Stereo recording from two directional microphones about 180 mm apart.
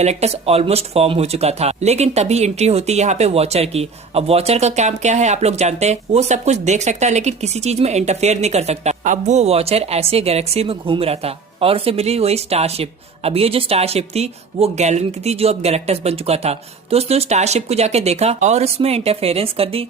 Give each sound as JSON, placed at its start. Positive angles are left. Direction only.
{"t": 0.0, "sound": "speech", "side_deg": -35}